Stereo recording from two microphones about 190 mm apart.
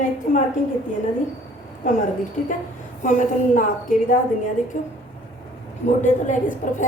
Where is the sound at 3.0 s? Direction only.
45° left (ahead or behind).